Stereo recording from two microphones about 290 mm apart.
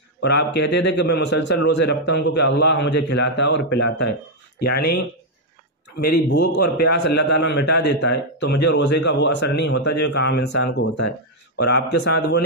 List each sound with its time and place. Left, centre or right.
0.2 s a man's voice: left
6.2 s a man's voice: left